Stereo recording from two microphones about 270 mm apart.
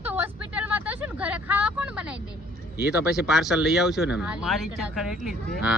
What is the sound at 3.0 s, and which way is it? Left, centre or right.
Speech, centre.